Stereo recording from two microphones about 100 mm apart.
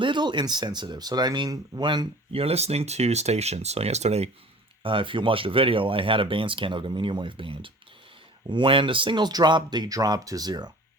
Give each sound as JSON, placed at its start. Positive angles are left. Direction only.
{"t": 0.0, "sound": "speech", "side_deg": -50}
{"t": 2.3, "sound": "speech", "side_deg": -85}
{"t": 4.8, "sound": "speech", "side_deg": -60}